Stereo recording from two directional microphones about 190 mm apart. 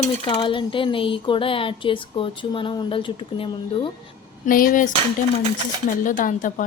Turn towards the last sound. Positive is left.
turn(degrees=45)  # may be behind; listen again after turning